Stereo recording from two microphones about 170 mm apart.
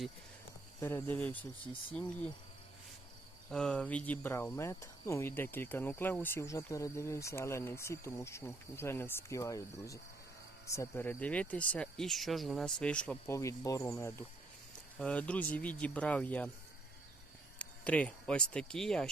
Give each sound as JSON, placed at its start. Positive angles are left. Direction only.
{"t": 0.8, "sound": "cricket", "side_deg": 15}
{"t": 3.5, "sound": "cricket", "side_deg": 5}
{"t": 13.3, "sound": "cricket", "side_deg": 20}
{"t": 17.6, "sound": "speech", "side_deg": 10}